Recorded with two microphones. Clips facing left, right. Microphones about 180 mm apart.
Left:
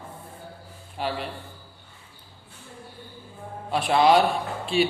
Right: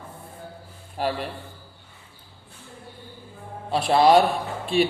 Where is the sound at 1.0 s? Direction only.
45° right (ahead or behind).